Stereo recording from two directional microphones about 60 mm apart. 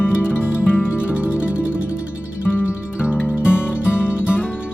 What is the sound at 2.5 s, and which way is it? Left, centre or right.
Music, left.